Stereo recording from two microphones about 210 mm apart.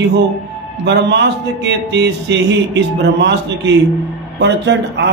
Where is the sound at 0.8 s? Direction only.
55° right (ahead or behind).